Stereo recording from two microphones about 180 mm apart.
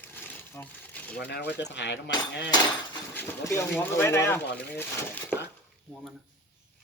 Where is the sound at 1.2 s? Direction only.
70° left (ahead or behind).